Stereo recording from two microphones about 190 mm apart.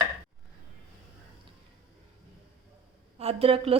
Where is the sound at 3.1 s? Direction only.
30° right (ahead or behind).